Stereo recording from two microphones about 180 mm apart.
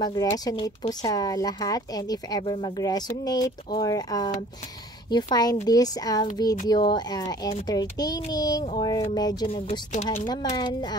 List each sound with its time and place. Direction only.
0.0 s speech: 20° left (ahead or behind)